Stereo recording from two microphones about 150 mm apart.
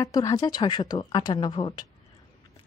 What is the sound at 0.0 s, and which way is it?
A woman's voice, 20° left (ahead or behind).